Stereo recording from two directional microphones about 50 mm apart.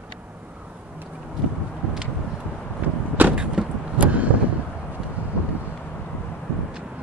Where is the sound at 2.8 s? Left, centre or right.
Right.